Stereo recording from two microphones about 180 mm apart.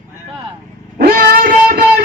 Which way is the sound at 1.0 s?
55° right (ahead or behind).